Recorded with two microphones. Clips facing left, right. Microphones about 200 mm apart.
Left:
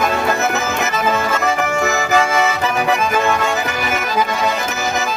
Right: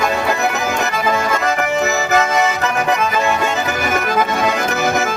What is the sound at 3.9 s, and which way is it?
Accordion, 50° right (ahead or behind).